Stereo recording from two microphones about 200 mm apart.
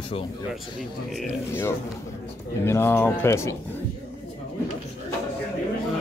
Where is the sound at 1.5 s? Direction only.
10° left (ahead or behind).